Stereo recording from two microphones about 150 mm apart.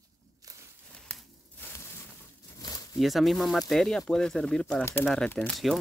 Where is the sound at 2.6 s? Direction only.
25° left (ahead or behind).